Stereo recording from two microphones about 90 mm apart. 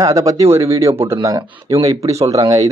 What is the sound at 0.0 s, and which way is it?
Speech, 40° right (ahead or behind).